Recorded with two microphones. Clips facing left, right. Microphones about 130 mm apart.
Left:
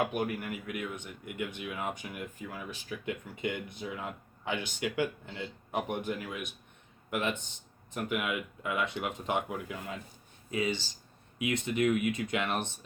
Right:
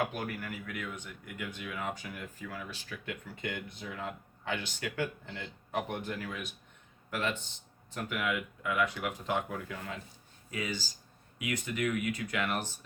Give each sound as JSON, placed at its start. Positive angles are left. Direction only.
{"t": 0.1, "sound": "speech", "side_deg": 20}